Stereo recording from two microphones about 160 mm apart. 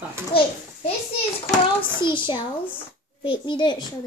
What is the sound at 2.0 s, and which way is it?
A child's voice, 30° left (ahead or behind).